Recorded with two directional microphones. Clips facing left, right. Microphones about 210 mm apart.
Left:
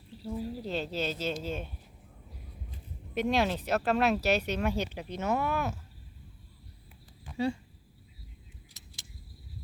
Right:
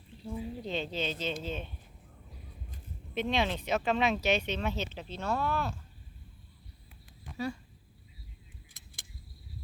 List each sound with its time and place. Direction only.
0.2 s speech: 5° left (ahead or behind)
3.2 s speech: 10° left (ahead or behind)
7.3 s speech: 30° left (ahead or behind)
8.8 s vehicle: 55° right (ahead or behind)